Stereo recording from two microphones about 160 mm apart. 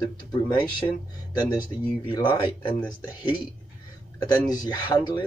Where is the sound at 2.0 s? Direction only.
30° left (ahead or behind).